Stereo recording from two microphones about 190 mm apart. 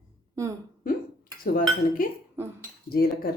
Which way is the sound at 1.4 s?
50° left (ahead or behind).